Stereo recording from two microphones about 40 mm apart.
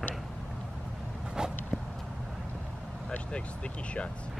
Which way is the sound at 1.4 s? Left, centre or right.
Centre.